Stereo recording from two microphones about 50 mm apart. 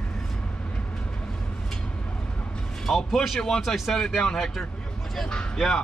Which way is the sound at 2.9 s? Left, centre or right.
Centre.